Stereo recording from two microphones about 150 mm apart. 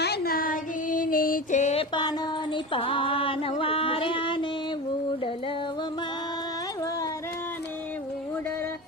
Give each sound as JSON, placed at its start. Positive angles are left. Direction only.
{"t": 0.0, "sound": "music", "side_deg": 90}
{"t": 2.7, "sound": "music", "side_deg": 35}